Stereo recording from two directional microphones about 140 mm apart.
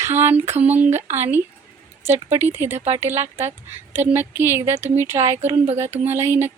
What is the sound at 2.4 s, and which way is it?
Speech, 15° right (ahead or behind).